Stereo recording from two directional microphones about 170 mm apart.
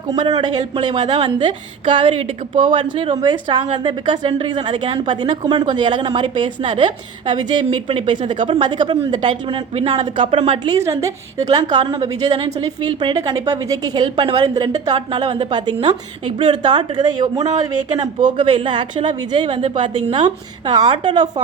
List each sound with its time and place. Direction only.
0.6 s a woman's voice: 30° right (ahead or behind)